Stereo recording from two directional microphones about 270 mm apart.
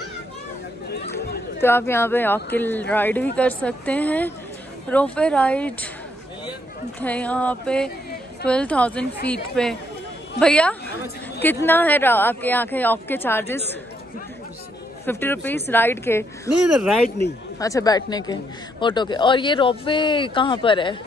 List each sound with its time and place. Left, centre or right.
1.6 s speech: centre
7.0 s speech: centre
15.0 s speech: centre
17.6 s speech: centre